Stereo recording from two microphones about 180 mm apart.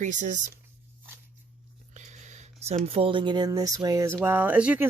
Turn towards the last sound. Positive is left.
turn(degrees=-10)  # may be behind; listen again after turning